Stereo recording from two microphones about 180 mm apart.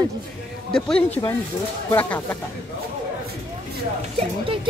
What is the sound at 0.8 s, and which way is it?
Speech, 5° left (ahead or behind).